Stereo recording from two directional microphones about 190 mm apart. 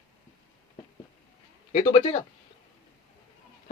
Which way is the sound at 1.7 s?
25° left (ahead or behind).